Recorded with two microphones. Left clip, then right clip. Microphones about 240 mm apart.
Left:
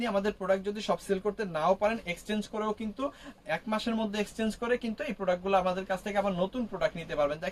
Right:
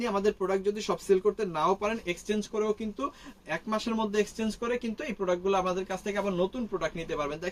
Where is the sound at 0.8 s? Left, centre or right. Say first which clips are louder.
Right 4 dB; centre.